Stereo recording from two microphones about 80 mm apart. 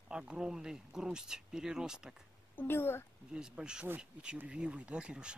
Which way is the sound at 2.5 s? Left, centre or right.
Left.